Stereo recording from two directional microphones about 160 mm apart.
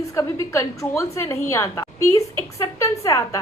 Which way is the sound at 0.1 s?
20° left (ahead or behind).